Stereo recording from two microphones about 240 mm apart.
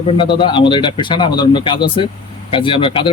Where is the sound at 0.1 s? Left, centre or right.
Centre.